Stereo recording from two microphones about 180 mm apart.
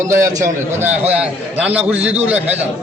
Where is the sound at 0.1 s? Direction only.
15° right (ahead or behind).